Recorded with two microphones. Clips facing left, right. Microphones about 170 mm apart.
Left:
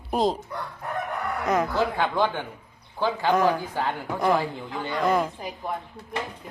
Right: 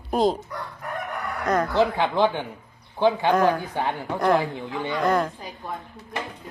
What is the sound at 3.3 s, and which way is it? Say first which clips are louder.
A woman's voice: right 1 dB; centre (ahead or behind).